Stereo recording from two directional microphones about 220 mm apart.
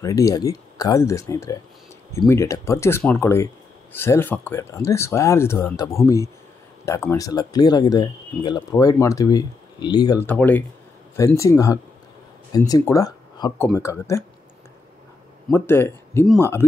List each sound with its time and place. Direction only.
0.0 s speech: 15° left (ahead or behind)
15.5 s speech: 10° left (ahead or behind)